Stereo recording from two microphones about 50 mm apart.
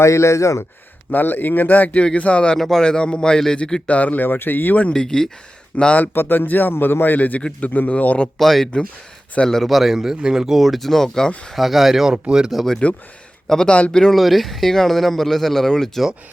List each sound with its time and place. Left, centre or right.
0.0 s speech: left
1.1 s a man's voice: left
2.6 s a man's voice: centre
2.8 s a man's voice: centre
3.8 s a man's voice: left
4.8 s a man's voice: centre
6.0 s a man's voice: left
8.4 s speech: centre
11.5 s speech: centre
12.1 s speech: centre
12.5 s speech: centre
13.5 s a man's voice: centre
14.0 s speech: centre